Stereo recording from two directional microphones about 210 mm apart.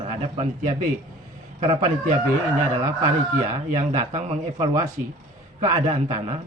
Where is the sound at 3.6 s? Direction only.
30° right (ahead or behind).